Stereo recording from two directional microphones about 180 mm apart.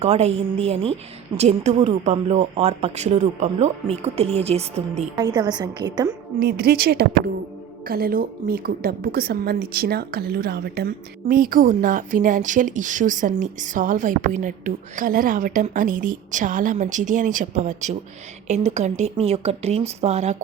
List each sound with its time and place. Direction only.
0.0 s speech: 35° right (ahead or behind)
5.1 s a woman's voice: 25° right (ahead or behind)
6.4 s a woman's voice: 60° right (ahead or behind); by 20.4 s 40° right (ahead or behind)